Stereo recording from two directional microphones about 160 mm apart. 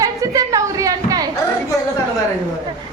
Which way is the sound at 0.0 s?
20° right (ahead or behind).